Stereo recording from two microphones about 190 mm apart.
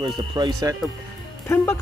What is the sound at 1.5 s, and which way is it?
Speech, 15° left (ahead or behind).